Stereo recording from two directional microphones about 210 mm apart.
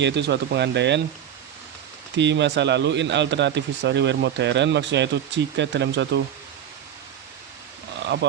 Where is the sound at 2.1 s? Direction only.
55° right (ahead or behind).